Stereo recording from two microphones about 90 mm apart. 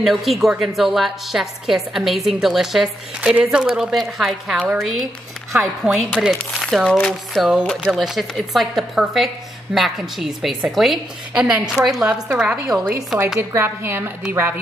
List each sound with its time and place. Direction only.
0.0 s a woman's voice: centre (ahead or behind)
3.2 s a woman's voice: 15° right (ahead or behind); by 7.4 s 10° left (ahead or behind)
7.4 s a woman's voice: 5° right (ahead or behind)
13.4 s a woman's voice: 25° right (ahead or behind)